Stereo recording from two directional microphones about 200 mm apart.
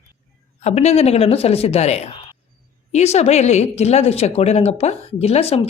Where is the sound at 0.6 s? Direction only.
30° left (ahead or behind).